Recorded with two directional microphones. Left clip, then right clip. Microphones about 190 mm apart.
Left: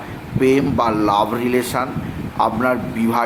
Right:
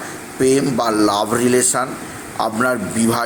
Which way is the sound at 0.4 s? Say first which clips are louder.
Even; 10° right (ahead or behind).